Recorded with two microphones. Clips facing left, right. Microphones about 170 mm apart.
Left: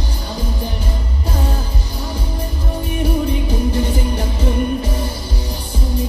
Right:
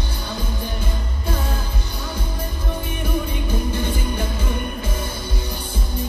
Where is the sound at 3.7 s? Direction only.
40° left (ahead or behind).